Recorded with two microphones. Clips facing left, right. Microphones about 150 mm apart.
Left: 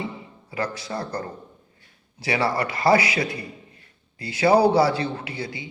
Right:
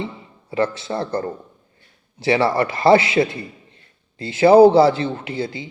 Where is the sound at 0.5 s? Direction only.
25° right (ahead or behind).